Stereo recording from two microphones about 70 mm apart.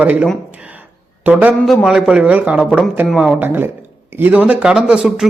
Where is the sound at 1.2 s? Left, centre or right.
Right.